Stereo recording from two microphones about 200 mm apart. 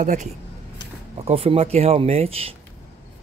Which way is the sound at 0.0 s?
40° right (ahead or behind).